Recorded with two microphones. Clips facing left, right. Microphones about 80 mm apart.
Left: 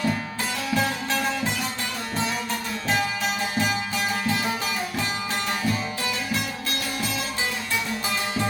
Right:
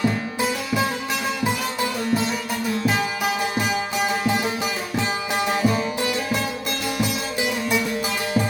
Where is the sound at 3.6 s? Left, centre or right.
Centre.